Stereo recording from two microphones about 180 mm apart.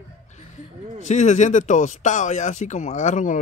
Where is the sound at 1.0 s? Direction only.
40° left (ahead or behind).